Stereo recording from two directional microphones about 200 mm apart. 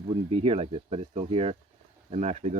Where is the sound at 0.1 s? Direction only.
30° right (ahead or behind).